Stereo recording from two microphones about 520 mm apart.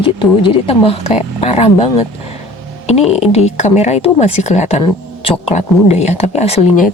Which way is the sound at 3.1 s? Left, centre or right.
Centre.